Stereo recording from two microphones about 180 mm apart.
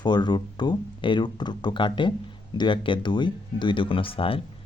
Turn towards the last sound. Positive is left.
turn(degrees=30)  # may be behind; listen again after turning